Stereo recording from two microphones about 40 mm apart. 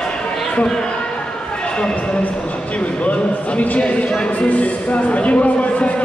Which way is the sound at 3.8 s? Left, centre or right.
Left.